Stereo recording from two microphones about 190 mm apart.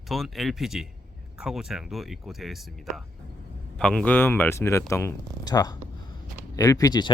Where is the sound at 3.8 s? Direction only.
5° left (ahead or behind).